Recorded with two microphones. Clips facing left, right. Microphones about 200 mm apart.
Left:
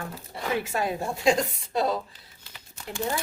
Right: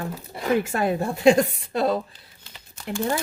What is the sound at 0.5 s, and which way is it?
Speech, 50° right (ahead or behind).